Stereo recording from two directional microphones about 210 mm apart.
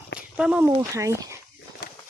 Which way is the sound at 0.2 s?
5° right (ahead or behind).